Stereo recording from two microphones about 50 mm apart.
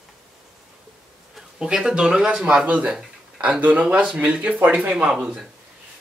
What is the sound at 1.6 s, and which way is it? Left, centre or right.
Speech, centre.